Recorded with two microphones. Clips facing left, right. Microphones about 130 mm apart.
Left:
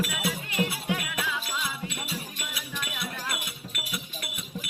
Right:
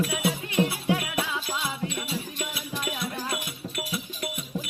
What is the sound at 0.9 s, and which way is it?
Music, 25° right (ahead or behind).